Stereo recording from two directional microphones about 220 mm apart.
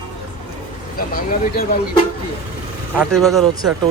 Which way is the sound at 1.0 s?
40° left (ahead or behind).